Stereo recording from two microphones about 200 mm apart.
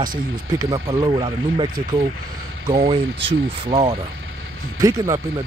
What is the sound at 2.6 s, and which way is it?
Speech, 20° right (ahead or behind).